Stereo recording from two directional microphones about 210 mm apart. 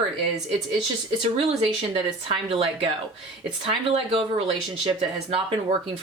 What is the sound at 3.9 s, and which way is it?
Speech, 25° right (ahead or behind).